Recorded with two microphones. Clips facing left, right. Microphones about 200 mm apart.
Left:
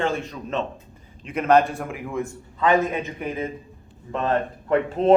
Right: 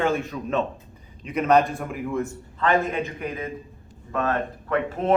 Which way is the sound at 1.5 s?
5° left (ahead or behind).